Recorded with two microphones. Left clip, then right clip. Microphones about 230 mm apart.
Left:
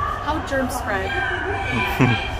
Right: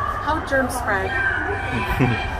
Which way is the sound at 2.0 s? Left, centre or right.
Centre.